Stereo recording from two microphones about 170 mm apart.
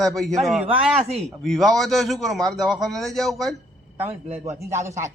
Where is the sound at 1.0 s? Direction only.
40° right (ahead or behind).